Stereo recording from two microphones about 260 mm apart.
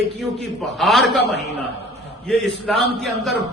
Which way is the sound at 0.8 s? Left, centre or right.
Centre.